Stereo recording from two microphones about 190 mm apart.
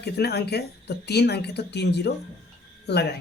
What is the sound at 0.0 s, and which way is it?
Speech, 60° left (ahead or behind).